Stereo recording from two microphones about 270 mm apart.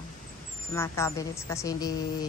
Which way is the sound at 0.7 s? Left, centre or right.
Centre.